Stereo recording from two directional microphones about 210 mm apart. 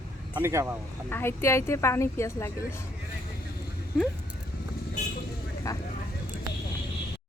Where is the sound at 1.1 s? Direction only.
10° left (ahead or behind).